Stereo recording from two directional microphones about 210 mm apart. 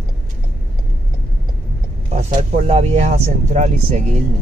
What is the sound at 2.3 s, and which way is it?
Speech, 30° right (ahead or behind).